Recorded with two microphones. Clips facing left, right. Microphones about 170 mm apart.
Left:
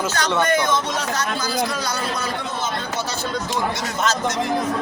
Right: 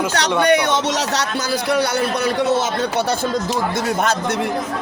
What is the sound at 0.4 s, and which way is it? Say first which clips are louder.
A man's voice: right 4 dB; 70° right (ahead or behind).